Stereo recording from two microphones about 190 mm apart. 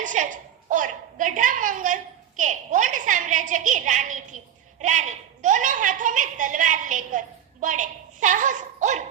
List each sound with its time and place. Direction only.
0.0 s a woman's voice: 40° right (ahead or behind)